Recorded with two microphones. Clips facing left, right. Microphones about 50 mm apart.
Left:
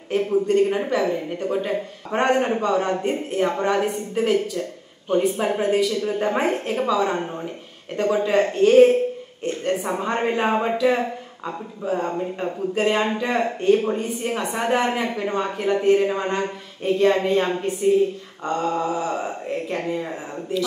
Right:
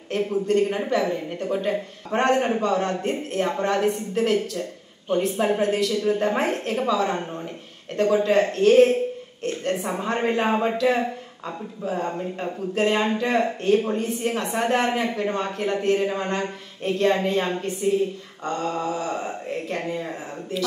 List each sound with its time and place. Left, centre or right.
0.1 s a woman's voice: centre